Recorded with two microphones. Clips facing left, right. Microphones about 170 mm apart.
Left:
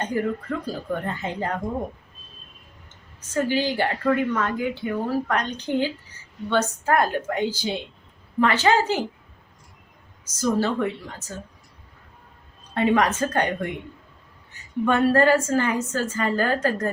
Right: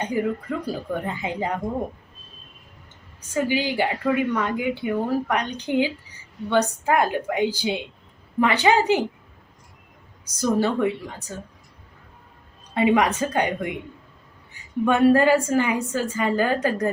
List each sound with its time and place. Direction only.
0.0 s a woman's voice: 10° right (ahead or behind)
3.3 s a woman's voice: 15° right (ahead or behind)
10.6 s a woman's voice: 15° right (ahead or behind)
12.7 s a woman's voice: 10° right (ahead or behind)
14.8 s a woman's voice: 15° right (ahead or behind)